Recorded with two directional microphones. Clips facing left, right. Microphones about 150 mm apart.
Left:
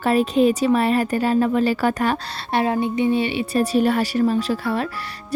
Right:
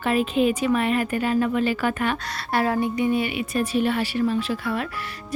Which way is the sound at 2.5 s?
20° left (ahead or behind).